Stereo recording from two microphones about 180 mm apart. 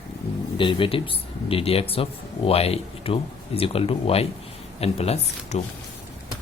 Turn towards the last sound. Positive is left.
turn(degrees=35)  # may be behind; listen again after turning